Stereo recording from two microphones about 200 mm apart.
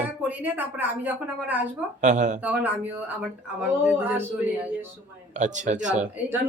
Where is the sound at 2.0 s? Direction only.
35° right (ahead or behind).